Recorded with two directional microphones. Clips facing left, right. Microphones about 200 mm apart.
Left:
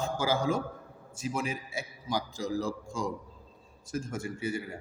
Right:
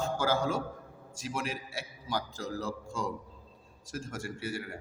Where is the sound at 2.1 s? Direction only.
10° left (ahead or behind).